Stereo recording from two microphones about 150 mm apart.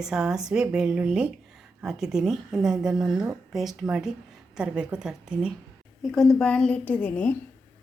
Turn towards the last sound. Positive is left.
turn(degrees=10)  # may be behind; listen again after turning